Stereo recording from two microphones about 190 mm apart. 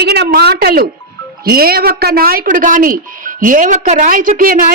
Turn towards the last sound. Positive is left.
turn(degrees=-45)  # may be behind; listen again after turning